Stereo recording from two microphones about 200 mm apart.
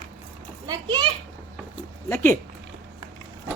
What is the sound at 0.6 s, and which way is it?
Speech, 20° right (ahead or behind).